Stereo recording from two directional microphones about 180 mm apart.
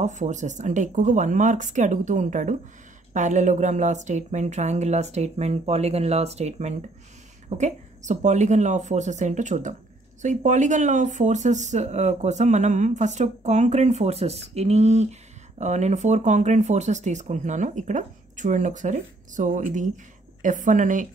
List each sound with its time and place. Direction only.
0.0 s speech: 40° right (ahead or behind)